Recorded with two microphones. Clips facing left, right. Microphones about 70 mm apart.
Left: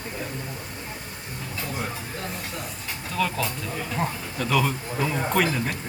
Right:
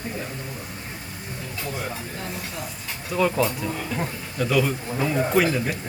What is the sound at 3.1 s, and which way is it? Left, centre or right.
Speech, centre.